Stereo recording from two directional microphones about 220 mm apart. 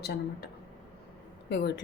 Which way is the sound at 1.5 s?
50° left (ahead or behind).